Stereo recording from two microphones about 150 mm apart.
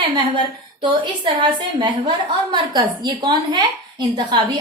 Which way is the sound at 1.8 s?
30° right (ahead or behind).